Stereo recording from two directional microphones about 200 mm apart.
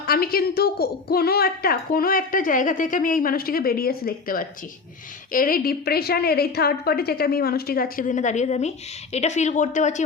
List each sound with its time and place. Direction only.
0.0 s a woman's voice: 50° left (ahead or behind)